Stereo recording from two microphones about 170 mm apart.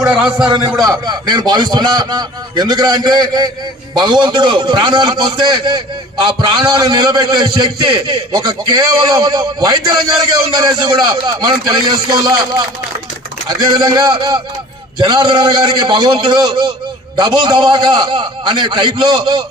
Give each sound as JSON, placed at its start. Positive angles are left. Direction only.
{"t": 0.0, "sound": "a man's voice", "side_deg": -5}
{"t": 0.4, "sound": "a man's voice", "side_deg": -25}
{"t": 13.7, "sound": "a man's voice", "side_deg": -25}